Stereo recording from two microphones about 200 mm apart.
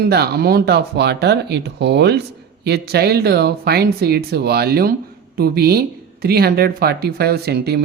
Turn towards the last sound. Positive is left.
turn(degrees=-55)  # may be behind; listen again after turning